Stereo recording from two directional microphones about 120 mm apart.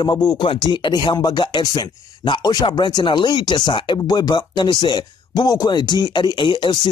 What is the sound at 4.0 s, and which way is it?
Speech, 35° left (ahead or behind).